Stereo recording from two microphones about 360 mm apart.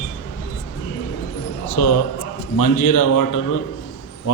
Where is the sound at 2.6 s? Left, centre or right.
Left.